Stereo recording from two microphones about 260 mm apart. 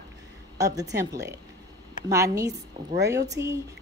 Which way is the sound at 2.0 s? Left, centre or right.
Centre.